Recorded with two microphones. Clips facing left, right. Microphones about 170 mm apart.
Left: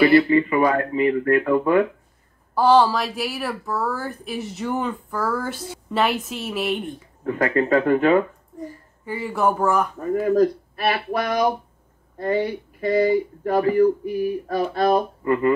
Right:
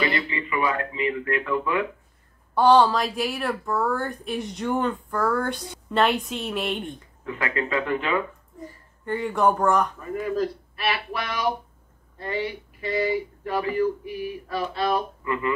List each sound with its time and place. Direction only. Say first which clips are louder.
0.2 s speech: left 9 dB; 45° left (ahead or behind)
2.5 s speech: left 1 dB; centre (ahead or behind)
7.2 s speech: left 8 dB; 45° left (ahead or behind)
9.0 s speech: even; 5° left (ahead or behind)
9.9 s speech: left 8 dB; 40° left (ahead or behind)